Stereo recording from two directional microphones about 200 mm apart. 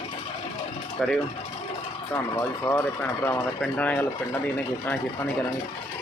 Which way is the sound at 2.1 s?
15° left (ahead or behind).